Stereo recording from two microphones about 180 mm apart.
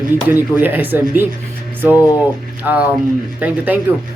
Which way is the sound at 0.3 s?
10° right (ahead or behind).